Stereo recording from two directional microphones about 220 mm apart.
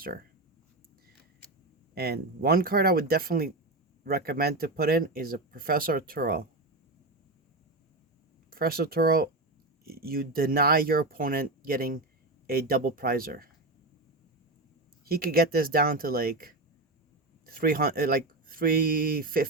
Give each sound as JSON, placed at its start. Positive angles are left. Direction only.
{"t": 0.0, "sound": "speech", "side_deg": -40}
{"t": 2.0, "sound": "speech", "side_deg": -45}
{"t": 8.4, "sound": "speech", "side_deg": -40}
{"t": 15.0, "sound": "speech", "side_deg": -40}